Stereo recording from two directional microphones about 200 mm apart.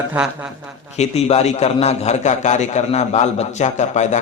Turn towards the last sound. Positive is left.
turn(degrees=35)  # may be behind; listen again after turning